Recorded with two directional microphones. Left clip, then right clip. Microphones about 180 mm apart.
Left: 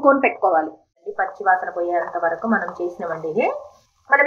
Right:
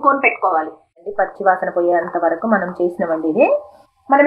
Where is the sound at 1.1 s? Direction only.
45° right (ahead or behind).